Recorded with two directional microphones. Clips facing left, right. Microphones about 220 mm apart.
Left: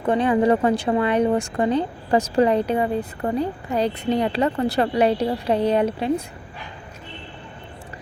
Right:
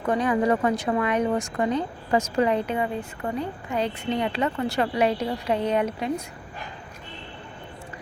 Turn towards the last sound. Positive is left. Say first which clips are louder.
# left 4 dB
turn(degrees=30)  # may be behind; listen again after turning